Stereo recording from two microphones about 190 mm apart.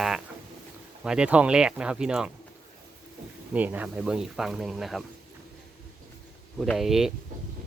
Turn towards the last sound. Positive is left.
turn(degrees=0)  # may be behind; listen again after turning